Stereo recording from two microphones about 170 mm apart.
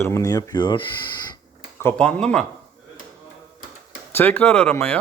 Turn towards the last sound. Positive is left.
turn(degrees=10)  # may be behind; listen again after turning